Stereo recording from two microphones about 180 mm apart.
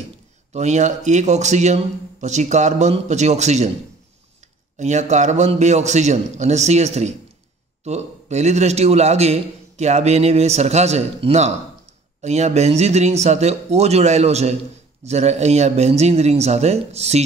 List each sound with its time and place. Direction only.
0.5 s a man's voice: 40° right (ahead or behind)
4.7 s a man's voice: 40° right (ahead or behind)